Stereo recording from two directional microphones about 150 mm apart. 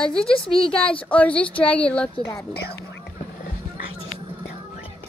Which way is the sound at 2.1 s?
25° left (ahead or behind).